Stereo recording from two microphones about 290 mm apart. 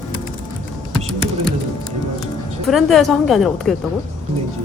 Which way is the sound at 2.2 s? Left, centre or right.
Centre.